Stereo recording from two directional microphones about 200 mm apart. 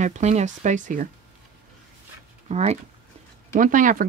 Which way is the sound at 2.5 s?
35° right (ahead or behind).